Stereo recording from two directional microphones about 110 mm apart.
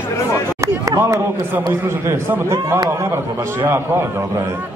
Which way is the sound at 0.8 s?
30° right (ahead or behind).